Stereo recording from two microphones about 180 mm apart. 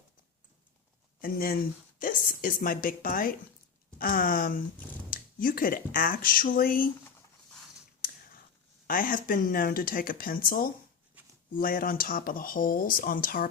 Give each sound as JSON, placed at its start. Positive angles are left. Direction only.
{"t": 1.2, "sound": "speech", "side_deg": 55}
{"t": 8.9, "sound": "speech", "side_deg": 50}